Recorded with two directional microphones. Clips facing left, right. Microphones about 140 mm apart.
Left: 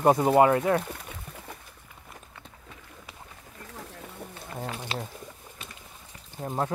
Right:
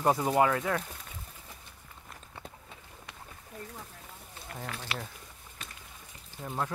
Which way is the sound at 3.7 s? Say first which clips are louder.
Left 4 dB; 80° left.